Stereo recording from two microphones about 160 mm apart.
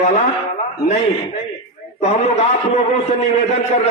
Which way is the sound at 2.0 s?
40° left (ahead or behind).